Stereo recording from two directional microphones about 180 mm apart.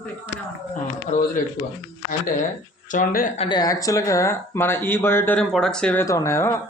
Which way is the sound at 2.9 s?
45° left (ahead or behind).